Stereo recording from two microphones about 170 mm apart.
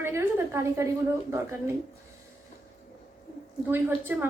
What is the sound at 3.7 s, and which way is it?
Speech, 10° right (ahead or behind).